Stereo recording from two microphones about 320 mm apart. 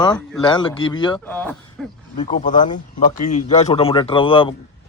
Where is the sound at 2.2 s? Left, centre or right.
Centre.